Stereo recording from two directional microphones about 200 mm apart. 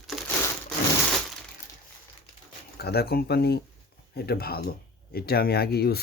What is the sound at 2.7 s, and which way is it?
Speech, 50° left (ahead or behind).